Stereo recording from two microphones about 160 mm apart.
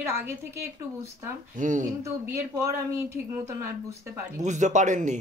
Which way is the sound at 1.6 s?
50° right (ahead or behind).